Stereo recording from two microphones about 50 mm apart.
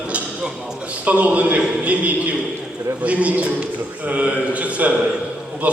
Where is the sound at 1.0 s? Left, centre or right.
Right.